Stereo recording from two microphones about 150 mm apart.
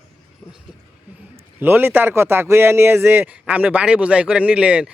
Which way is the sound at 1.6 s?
15° right (ahead or behind).